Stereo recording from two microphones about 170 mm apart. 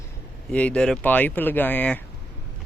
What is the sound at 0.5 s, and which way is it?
Speech, 5° left (ahead or behind).